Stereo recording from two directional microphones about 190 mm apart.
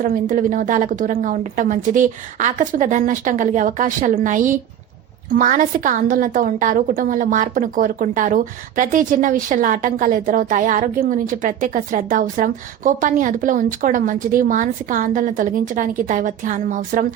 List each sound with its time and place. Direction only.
0.0 s a woman's voice: 45° right (ahead or behind)